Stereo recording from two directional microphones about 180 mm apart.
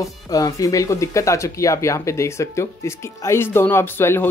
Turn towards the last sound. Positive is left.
turn(degrees=15)  # may be behind; listen again after turning